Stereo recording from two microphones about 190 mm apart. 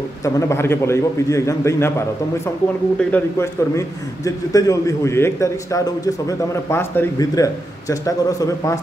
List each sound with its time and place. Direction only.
0.2 s a man's voice: 15° left (ahead or behind)